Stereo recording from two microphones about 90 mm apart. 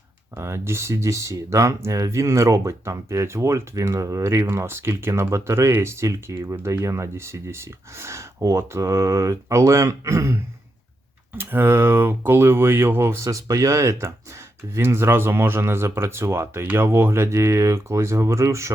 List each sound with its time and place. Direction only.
0.3 s speech: 30° right (ahead or behind)